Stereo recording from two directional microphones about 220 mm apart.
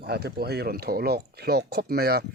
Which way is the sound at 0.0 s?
45° right (ahead or behind).